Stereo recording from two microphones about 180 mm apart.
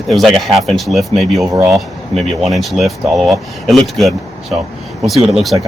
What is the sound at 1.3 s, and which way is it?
Speech, 15° right (ahead or behind).